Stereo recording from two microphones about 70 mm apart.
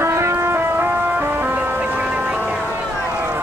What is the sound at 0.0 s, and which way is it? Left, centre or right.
Music, right.